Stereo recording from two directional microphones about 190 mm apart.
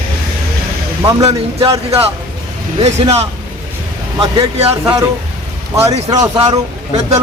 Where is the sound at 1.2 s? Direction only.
20° right (ahead or behind).